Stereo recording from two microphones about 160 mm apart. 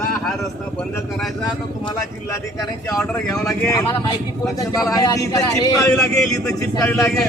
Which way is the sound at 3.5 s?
20° left (ahead or behind).